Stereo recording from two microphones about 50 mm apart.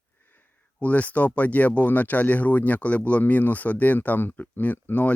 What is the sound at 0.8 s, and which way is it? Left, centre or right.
Speech, left.